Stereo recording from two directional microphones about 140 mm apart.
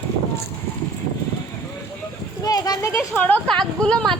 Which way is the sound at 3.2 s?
10° left (ahead or behind).